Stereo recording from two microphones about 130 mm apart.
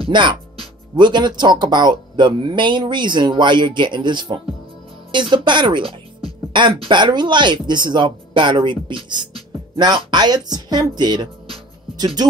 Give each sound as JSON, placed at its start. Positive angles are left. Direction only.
{"t": 0.0, "sound": "speech", "side_deg": -35}